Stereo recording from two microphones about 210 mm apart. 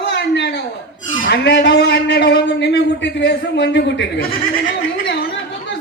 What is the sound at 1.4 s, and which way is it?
A man's voice, 55° left (ahead or behind).